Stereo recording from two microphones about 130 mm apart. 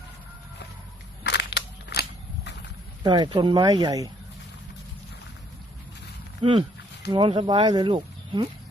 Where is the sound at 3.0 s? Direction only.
35° right (ahead or behind).